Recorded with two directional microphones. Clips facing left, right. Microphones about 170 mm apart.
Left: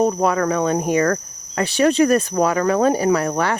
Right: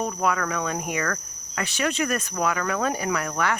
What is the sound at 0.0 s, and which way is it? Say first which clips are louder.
Cricket: left 8 dB; 35° left (ahead or behind).